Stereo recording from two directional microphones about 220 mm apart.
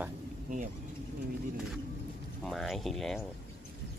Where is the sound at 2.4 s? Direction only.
Centre (ahead or behind).